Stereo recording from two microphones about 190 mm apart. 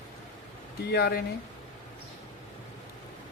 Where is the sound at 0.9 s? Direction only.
55° left (ahead or behind).